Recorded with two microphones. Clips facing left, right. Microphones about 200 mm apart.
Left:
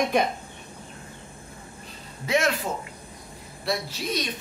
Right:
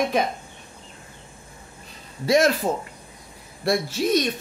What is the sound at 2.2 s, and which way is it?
Speech, 35° right (ahead or behind).